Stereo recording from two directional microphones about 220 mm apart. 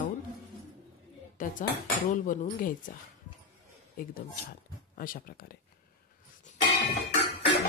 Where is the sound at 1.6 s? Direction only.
40° left (ahead or behind).